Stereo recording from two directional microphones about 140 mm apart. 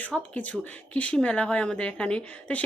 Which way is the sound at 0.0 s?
10° left (ahead or behind).